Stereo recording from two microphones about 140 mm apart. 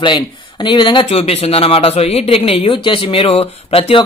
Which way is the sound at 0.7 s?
35° left (ahead or behind).